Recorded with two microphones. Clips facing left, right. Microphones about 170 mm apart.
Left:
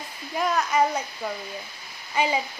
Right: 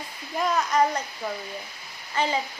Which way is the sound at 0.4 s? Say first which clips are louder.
Even; centre (ahead or behind).